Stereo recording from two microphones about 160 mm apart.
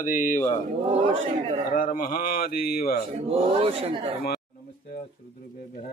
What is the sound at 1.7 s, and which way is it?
Speech, 60° left (ahead or behind).